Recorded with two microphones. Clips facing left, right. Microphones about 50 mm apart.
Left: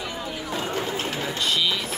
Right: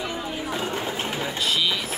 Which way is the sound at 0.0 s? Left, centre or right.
Centre.